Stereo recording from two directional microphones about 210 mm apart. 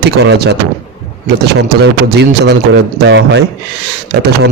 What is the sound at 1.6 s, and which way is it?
A man's voice, 55° right (ahead or behind).